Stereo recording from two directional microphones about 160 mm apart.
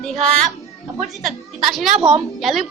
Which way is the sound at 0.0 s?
Centre (ahead or behind).